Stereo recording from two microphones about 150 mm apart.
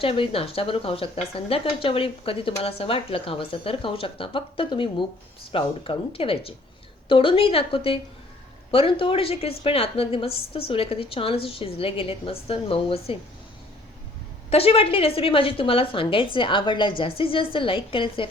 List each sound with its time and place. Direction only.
0.0 s speech: 40° left (ahead or behind)
14.5 s speech: 40° left (ahead or behind)